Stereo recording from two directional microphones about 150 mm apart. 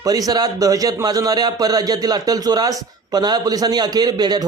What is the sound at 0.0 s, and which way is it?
A man's voice, 25° right (ahead or behind).